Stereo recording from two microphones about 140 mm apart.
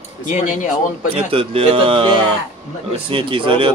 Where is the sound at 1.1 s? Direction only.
40° right (ahead or behind).